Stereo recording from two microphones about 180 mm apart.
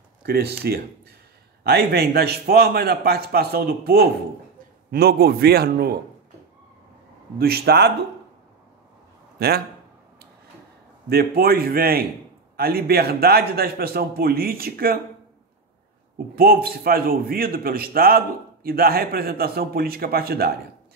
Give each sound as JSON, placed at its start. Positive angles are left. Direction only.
{"t": 0.2, "sound": "a man's voice", "side_deg": -60}
{"t": 7.3, "sound": "a man's voice", "side_deg": -60}
{"t": 9.4, "sound": "a man's voice", "side_deg": -60}
{"t": 11.1, "sound": "a man's voice", "side_deg": -60}
{"t": 16.3, "sound": "a man's voice", "side_deg": -55}